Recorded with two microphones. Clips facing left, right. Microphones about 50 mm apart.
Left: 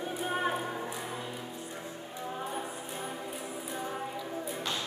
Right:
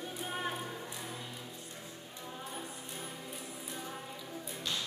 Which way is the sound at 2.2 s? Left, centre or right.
Left.